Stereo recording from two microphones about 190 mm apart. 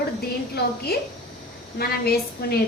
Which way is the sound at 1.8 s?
55° left (ahead or behind).